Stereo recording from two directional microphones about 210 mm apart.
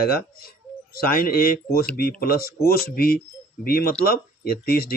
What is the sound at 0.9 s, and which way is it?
Speech, 45° left (ahead or behind).